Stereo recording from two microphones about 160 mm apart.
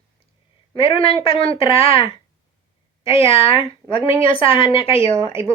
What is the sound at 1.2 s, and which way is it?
Speech, 35° left (ahead or behind).